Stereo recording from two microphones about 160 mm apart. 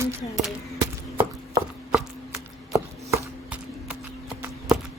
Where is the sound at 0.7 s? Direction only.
20° right (ahead or behind).